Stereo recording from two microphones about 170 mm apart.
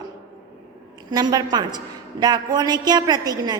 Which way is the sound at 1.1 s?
25° right (ahead or behind).